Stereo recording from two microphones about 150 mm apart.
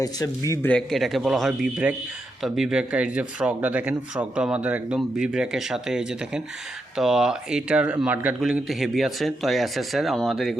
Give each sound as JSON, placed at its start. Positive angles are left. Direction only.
{"t": 0.0, "sound": "speech", "side_deg": 20}
{"t": 0.7, "sound": "speech", "side_deg": 5}